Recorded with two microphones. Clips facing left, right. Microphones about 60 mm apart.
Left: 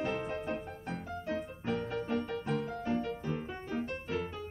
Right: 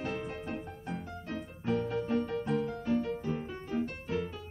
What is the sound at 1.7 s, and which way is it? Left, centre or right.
Music, left.